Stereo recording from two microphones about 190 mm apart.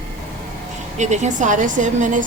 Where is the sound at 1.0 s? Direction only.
40° right (ahead or behind).